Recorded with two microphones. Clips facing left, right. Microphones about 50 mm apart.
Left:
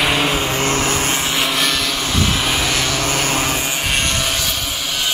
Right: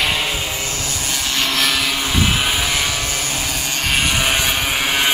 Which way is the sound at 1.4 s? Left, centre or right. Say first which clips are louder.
Even; centre.